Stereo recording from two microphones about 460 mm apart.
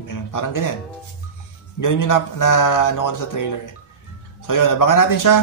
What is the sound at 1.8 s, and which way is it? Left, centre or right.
Speech, left.